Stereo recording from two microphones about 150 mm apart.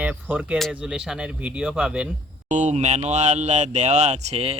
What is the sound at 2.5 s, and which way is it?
Speech, 55° right (ahead or behind).